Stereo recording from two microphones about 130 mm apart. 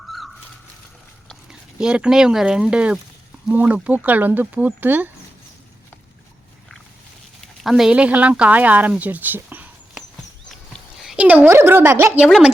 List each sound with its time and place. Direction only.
1.5 s speech: 5° right (ahead or behind)
7.4 s speech: centre (ahead or behind)